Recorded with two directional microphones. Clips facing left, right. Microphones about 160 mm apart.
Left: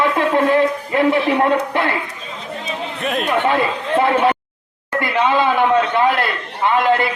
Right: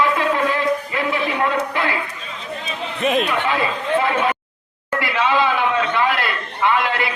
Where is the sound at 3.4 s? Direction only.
50° left (ahead or behind).